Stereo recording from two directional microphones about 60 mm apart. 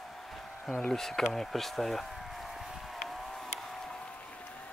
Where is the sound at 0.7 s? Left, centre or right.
Centre.